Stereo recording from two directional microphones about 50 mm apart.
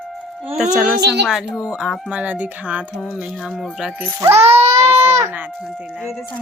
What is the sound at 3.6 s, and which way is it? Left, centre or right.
Speech, centre.